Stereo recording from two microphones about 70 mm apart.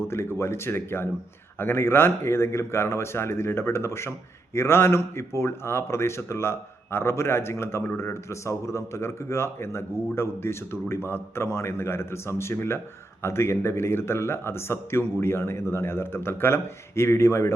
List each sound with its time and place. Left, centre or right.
0.0 s speech: left